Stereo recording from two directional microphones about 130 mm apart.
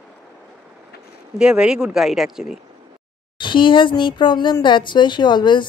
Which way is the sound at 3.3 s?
40° left (ahead or behind).